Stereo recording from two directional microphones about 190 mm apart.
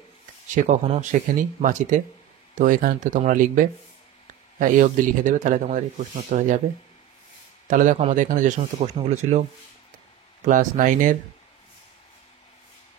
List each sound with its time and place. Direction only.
0.6 s speech: 40° right (ahead or behind)
7.6 s a man's voice: 45° right (ahead or behind)
10.4 s speech: 40° right (ahead or behind)